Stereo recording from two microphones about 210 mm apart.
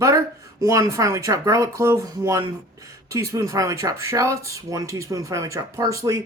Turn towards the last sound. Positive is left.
turn(degrees=-15)  # may be behind; listen again after turning